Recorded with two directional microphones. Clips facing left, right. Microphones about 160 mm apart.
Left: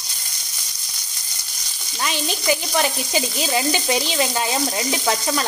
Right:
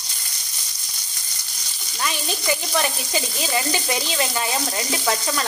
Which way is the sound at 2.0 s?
20° left (ahead or behind).